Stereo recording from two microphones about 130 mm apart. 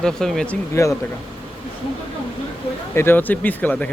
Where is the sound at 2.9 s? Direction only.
20° left (ahead or behind).